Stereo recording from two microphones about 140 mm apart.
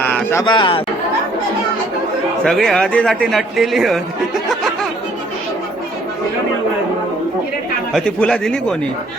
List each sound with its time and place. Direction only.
0.0 s a sound: 10° left (ahead or behind)
0.4 s speech: 35° left (ahead or behind)
2.4 s speech: centre (ahead or behind)
7.9 s speech: 5° left (ahead or behind)